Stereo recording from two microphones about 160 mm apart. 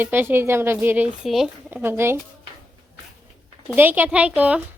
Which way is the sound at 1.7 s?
15° right (ahead or behind).